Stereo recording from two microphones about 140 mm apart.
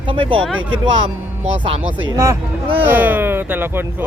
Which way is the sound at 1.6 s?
35° right (ahead or behind).